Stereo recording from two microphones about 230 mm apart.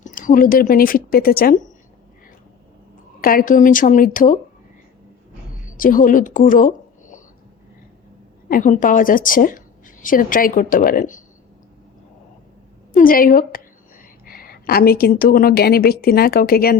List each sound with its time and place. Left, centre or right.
0.0 s speech: left
3.2 s a woman's voice: left
5.7 s a woman's voice: left
8.4 s a woman's voice: left
12.9 s a woman's voice: left